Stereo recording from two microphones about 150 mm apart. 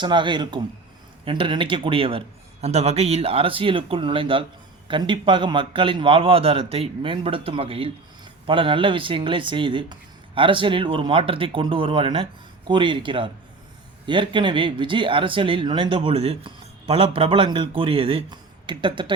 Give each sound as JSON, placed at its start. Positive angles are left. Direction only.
{"t": 0.0, "sound": "speech", "side_deg": -30}